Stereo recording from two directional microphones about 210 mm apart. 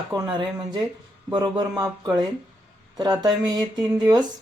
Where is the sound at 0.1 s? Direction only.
20° right (ahead or behind).